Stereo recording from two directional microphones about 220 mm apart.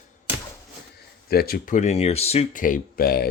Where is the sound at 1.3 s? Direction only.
45° left (ahead or behind).